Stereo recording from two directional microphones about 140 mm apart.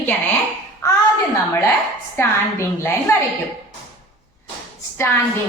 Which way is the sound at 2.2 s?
20° left (ahead or behind).